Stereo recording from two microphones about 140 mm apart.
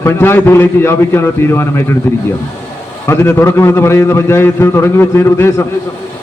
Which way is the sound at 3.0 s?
20° left (ahead or behind).